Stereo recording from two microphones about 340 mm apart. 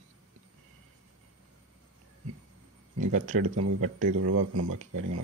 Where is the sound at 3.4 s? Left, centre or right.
Right.